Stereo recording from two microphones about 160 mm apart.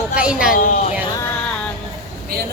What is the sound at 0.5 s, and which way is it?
Speech, 55° left (ahead or behind).